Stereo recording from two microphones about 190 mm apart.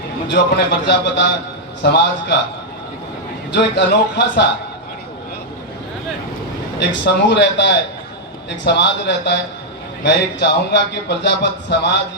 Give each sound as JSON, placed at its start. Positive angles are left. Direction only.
{"t": 0.3, "sound": "a man's voice", "side_deg": 60}
{"t": 3.5, "sound": "a man's voice", "side_deg": 65}
{"t": 6.7, "sound": "a man's voice", "side_deg": 65}